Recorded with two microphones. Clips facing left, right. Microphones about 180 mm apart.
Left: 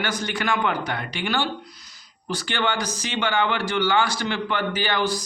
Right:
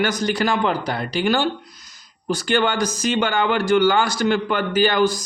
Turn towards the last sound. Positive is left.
turn(degrees=-45)  # may be behind; listen again after turning